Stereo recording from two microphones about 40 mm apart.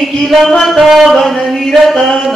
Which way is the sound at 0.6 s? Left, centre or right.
Centre.